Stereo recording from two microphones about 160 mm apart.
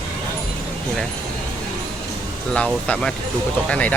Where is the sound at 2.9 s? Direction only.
5° left (ahead or behind).